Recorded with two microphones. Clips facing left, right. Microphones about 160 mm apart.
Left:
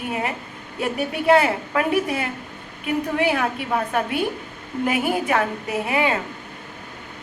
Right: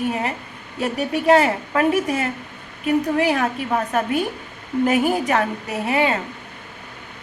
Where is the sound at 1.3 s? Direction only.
40° right (ahead or behind).